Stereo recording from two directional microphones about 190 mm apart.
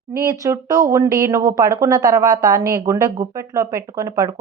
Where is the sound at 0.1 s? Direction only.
15° right (ahead or behind).